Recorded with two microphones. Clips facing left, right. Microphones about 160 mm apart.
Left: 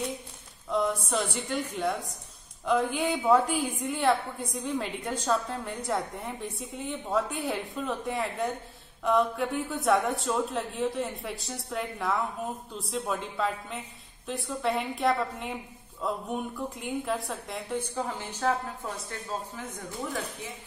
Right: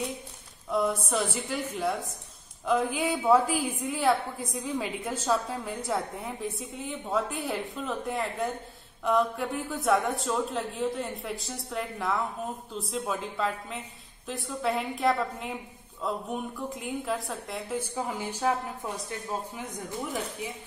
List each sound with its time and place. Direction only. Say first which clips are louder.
0.7 s a woman's voice: even; 5° right (ahead or behind)